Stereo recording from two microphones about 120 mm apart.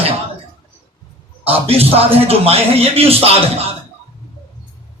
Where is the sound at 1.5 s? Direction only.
55° right (ahead or behind).